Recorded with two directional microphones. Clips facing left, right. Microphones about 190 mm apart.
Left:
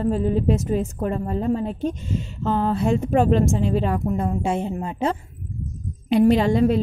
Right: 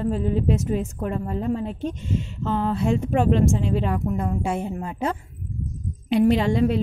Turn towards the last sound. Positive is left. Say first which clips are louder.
# left 2 dB
turn(degrees=40)  # may be behind; listen again after turning